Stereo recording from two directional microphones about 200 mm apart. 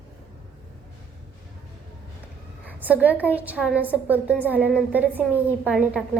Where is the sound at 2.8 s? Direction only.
10° right (ahead or behind).